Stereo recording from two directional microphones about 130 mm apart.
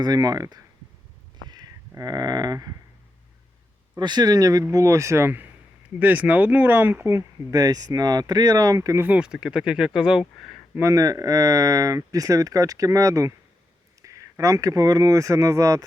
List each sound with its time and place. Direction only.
0.0 s speech: 30° right (ahead or behind)
1.5 s a sound: 30° right (ahead or behind)
3.9 s speech: 35° right (ahead or behind)
9.0 s speech: 10° right (ahead or behind)
10.8 s speech: 25° right (ahead or behind)